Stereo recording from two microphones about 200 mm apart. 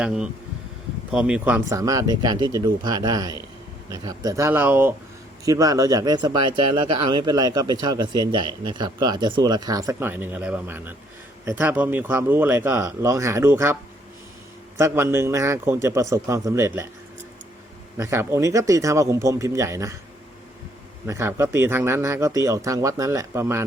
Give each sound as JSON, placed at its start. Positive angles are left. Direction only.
{"t": 0.0, "sound": "speech", "side_deg": -5}
{"t": 14.8, "sound": "speech", "side_deg": -15}
{"t": 17.9, "sound": "speech", "side_deg": -15}
{"t": 21.1, "sound": "speech", "side_deg": -15}